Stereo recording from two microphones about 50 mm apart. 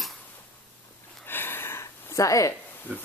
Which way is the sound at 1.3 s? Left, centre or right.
Left.